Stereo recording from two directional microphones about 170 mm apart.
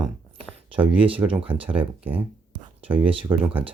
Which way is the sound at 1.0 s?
30° right (ahead or behind).